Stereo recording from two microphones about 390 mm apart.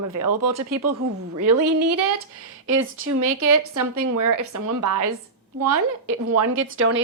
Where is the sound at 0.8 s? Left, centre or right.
Right.